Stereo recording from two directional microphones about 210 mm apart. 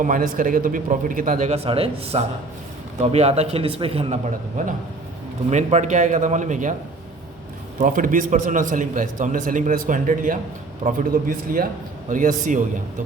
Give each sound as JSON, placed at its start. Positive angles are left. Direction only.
{"t": 0.0, "sound": "a man's voice", "side_deg": -40}
{"t": 7.8, "sound": "a man's voice", "side_deg": -40}